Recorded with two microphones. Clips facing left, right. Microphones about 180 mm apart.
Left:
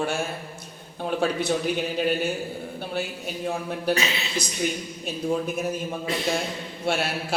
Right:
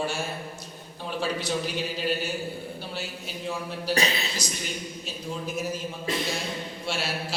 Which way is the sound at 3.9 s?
35° right (ahead or behind).